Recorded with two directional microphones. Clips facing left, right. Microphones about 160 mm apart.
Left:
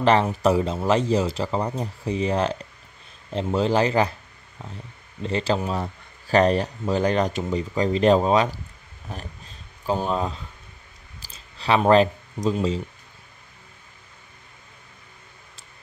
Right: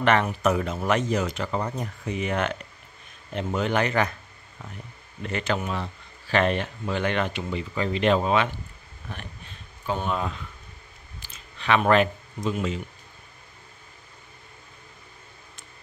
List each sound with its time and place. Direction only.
0.0 s speech: 30° left (ahead or behind)
5.2 s speech: 30° left (ahead or behind)
9.1 s a sound: 35° left (ahead or behind)